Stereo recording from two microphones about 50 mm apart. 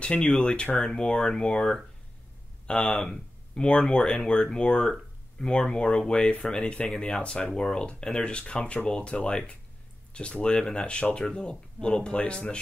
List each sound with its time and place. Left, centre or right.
0.0 s speech: centre